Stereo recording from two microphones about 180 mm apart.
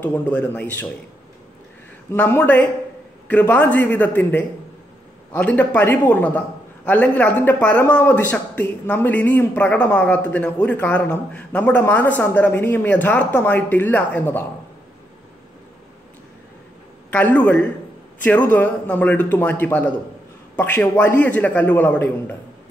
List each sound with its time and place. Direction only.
0.0 s a man's voice: 10° left (ahead or behind)
2.0 s a man's voice: 10° left (ahead or behind)
17.1 s a man's voice: 10° left (ahead or behind)